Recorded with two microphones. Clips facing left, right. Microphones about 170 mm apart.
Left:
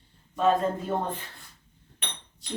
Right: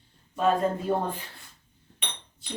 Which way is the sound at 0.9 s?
15° right (ahead or behind).